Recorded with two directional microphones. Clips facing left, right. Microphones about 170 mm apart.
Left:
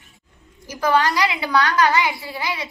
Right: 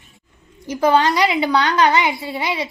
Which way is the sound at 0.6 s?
25° right (ahead or behind).